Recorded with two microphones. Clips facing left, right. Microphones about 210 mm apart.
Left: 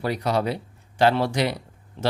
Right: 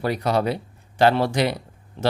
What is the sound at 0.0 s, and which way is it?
Speech, 50° right (ahead or behind).